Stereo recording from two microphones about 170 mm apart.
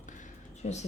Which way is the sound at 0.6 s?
40° left (ahead or behind).